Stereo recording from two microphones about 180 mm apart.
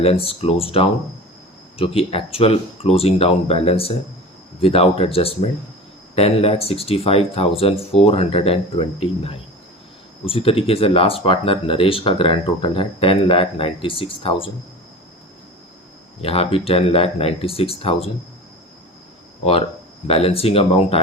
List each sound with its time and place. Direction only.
0.0 s speech: 30° left (ahead or behind)
16.2 s speech: 30° left (ahead or behind)
20.1 s speech: 30° left (ahead or behind)